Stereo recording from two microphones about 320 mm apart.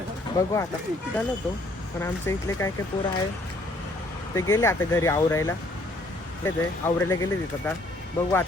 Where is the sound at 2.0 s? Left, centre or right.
Centre.